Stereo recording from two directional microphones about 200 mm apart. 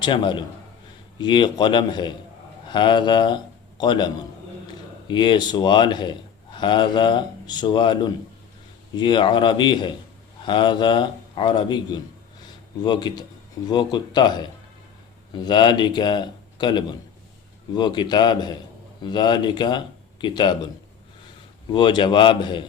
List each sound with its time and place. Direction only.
0.0 s a man's voice: 25° left (ahead or behind)
21.7 s a man's voice: 25° left (ahead or behind)